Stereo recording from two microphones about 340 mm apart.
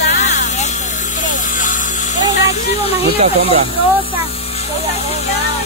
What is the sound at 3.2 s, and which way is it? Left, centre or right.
Speech, centre.